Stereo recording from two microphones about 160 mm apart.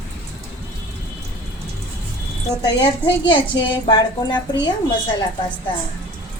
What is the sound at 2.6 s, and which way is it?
A woman's voice, 30° left (ahead or behind).